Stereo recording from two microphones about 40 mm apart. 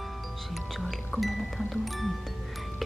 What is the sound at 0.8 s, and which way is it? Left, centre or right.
Music, centre.